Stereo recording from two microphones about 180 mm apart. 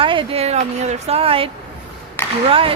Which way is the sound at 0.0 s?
30° right (ahead or behind).